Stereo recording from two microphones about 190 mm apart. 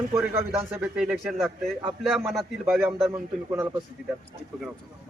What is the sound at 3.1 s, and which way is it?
Speech, 15° right (ahead or behind).